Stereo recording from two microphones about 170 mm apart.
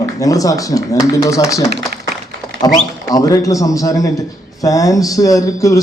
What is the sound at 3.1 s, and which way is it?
A man's voice, 20° left (ahead or behind).